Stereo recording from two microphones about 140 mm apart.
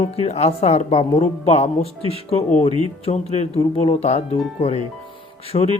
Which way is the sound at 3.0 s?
50° left (ahead or behind).